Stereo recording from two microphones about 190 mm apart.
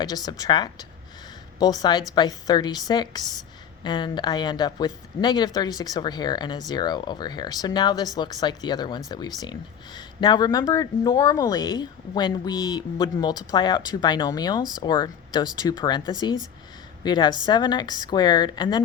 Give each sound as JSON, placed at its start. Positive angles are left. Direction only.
{"t": 0.0, "sound": "a woman's voice", "side_deg": 20}